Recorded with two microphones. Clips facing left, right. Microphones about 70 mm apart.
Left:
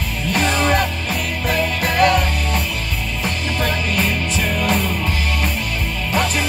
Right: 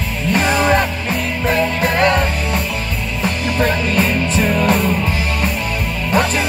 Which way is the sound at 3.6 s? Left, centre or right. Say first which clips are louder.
Right 5 dB; right.